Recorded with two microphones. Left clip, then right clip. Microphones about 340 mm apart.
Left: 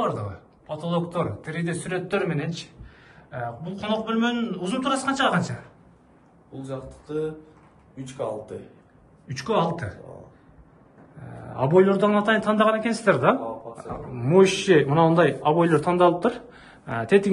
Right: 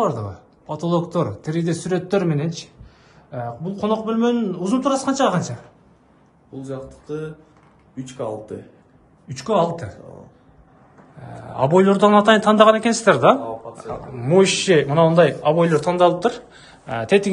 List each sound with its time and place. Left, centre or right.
0.0 s a man's voice: centre
6.6 s speech: right
9.3 s a man's voice: centre
11.1 s a man's voice: centre